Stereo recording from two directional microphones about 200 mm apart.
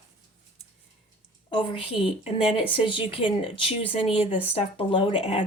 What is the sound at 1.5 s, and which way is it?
A woman's voice, 25° left (ahead or behind).